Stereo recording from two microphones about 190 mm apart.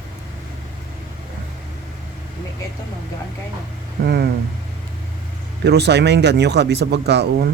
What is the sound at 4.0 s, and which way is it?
Vehicle, 55° right (ahead or behind).